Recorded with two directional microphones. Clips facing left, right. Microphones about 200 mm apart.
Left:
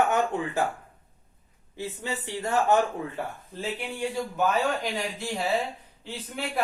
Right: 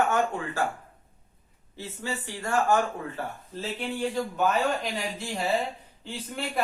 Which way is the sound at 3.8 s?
5° left (ahead or behind).